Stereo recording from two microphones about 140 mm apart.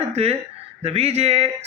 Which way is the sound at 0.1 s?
45° right (ahead or behind).